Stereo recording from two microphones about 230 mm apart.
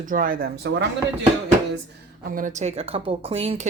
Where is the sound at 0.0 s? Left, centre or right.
Right.